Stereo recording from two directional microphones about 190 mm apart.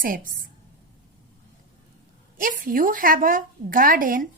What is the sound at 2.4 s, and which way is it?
A woman's voice, 45° right (ahead or behind).